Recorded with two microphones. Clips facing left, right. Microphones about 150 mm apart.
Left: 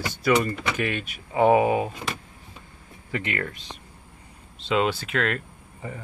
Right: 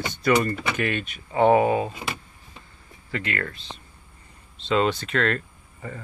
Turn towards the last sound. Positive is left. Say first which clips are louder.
# left 1 dB
turn(degrees=10)  # may be behind; listen again after turning